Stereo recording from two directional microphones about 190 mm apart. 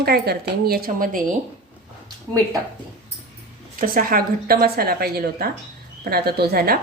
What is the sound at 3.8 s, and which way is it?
Speech, 50° right (ahead or behind).